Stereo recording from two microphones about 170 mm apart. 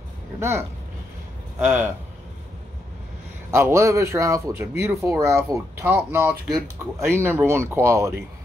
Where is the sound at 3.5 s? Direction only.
15° right (ahead or behind).